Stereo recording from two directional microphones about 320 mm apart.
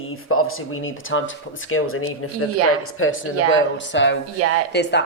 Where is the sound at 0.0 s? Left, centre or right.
Left.